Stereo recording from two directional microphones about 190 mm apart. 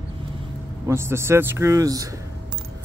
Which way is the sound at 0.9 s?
15° right (ahead or behind).